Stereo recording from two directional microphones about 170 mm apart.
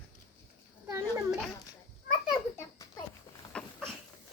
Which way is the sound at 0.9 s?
15° right (ahead or behind).